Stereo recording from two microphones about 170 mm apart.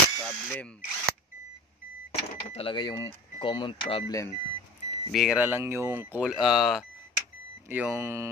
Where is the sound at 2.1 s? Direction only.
35° left (ahead or behind).